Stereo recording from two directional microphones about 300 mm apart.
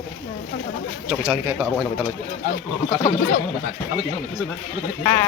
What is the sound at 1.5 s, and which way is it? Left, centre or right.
Speech, centre.